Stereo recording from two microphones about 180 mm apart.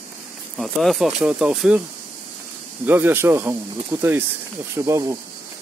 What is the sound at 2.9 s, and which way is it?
Speech, 10° right (ahead or behind).